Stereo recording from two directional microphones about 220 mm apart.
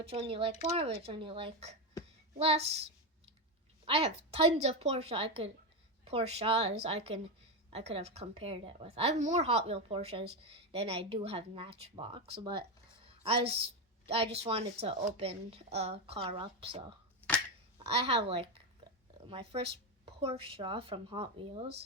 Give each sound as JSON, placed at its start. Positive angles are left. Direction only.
{"t": 0.0, "sound": "a woman's voice", "side_deg": -25}
{"t": 3.8, "sound": "a woman's voice", "side_deg": -25}
{"t": 13.1, "sound": "a sound", "side_deg": -25}
{"t": 14.3, "sound": "a woman's voice", "side_deg": -25}
{"t": 17.8, "sound": "a woman's voice", "side_deg": -25}